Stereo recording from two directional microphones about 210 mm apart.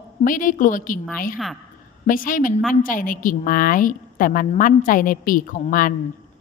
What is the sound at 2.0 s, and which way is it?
A woman's voice, 40° left (ahead or behind).